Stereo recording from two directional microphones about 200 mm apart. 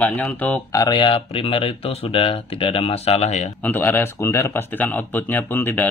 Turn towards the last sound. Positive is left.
turn(degrees=10)  # may be behind; listen again after turning